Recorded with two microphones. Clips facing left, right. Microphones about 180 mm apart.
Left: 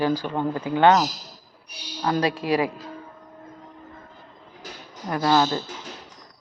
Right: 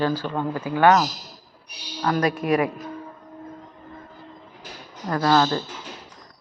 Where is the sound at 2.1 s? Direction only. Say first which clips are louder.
Right 1 dB; 30° left (ahead or behind).